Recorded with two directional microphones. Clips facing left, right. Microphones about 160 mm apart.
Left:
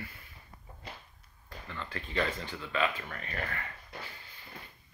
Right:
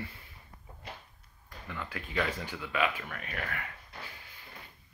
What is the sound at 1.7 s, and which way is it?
Speech, 10° right (ahead or behind).